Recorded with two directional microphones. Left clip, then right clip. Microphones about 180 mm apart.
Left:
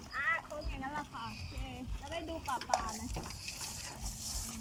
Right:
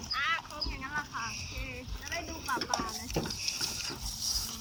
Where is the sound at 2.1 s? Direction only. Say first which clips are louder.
Right 3 dB; 40° left (ahead or behind).